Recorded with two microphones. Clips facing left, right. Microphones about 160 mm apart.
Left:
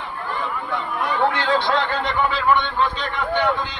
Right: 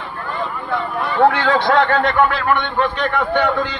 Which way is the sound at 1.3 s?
65° right (ahead or behind).